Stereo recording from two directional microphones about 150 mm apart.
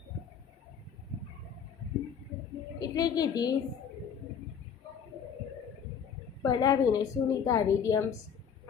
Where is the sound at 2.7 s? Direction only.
25° left (ahead or behind).